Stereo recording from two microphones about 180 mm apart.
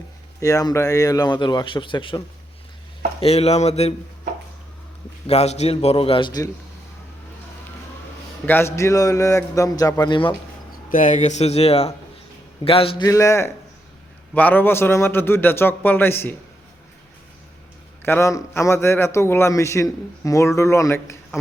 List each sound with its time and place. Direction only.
0.3 s a man's voice: 20° left (ahead or behind); by 3.9 s 35° left (ahead or behind)
5.2 s a man's voice: 35° left (ahead or behind)
8.4 s a man's voice: 15° left (ahead or behind)
10.8 s a man's voice: 50° left (ahead or behind); by 13.1 s 30° left (ahead or behind)
13.1 s a man's voice: 15° left (ahead or behind)
18.0 s a man's voice: 15° left (ahead or behind)